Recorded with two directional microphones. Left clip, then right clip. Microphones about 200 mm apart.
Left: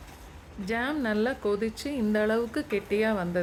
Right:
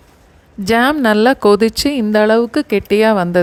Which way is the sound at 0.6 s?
45° right (ahead or behind).